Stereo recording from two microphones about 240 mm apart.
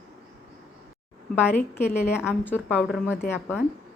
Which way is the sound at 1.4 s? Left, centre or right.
Centre.